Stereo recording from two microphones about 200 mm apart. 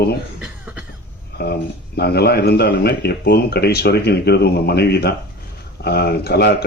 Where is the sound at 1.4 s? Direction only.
55° left (ahead or behind).